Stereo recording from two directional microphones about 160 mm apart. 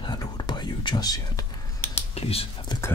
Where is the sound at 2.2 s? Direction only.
35° left (ahead or behind).